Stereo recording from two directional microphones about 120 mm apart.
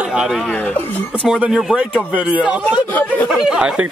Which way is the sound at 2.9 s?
15° left (ahead or behind).